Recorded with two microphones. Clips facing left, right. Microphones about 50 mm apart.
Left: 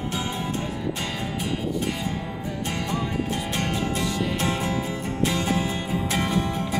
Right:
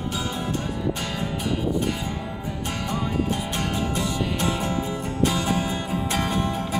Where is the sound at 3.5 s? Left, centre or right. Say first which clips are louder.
Even; centre.